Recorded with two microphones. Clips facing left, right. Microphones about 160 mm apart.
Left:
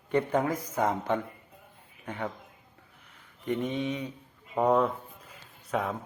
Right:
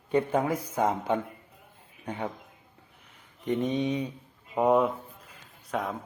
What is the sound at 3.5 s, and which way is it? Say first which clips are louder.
Mantra: right 3 dB; 20° right (ahead or behind).